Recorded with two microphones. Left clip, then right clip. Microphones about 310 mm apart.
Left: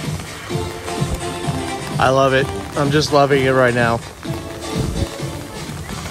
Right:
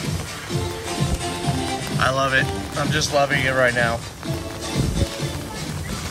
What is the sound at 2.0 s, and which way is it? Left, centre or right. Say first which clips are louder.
Speech: left 5 dB; centre.